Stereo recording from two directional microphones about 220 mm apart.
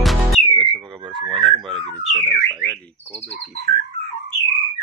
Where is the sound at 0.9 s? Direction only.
20° right (ahead or behind).